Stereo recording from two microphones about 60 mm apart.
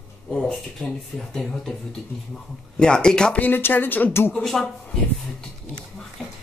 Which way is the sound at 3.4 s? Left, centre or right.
Left.